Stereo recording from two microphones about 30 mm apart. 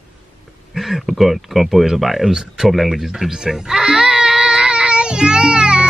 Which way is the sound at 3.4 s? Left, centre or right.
Right.